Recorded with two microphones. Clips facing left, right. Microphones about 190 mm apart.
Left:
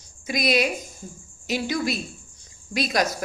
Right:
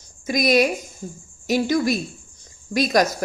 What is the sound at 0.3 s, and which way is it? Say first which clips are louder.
Speech: right 5 dB; 45° right (ahead or behind).